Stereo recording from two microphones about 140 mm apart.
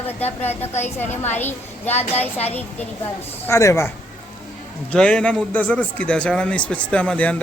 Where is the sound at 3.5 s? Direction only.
20° left (ahead or behind).